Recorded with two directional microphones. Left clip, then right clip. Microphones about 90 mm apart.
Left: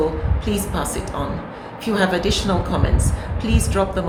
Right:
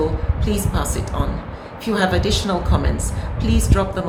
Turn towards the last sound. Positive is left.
turn(degrees=-15)  # may be behind; listen again after turning